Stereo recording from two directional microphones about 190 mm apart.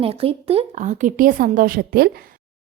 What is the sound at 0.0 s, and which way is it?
A woman's voice, 30° right (ahead or behind).